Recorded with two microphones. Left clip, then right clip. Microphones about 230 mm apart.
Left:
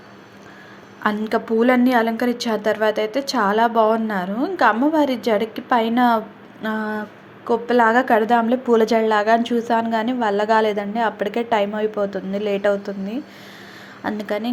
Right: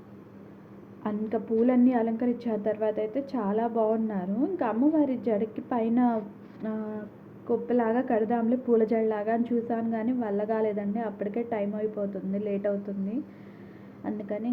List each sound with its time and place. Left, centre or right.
1.0 s a woman's voice: centre
14.2 s speech: centre